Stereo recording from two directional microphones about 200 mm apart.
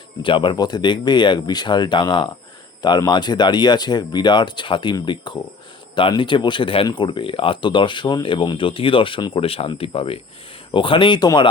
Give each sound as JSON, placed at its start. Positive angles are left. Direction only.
{"t": 0.2, "sound": "speech", "side_deg": 25}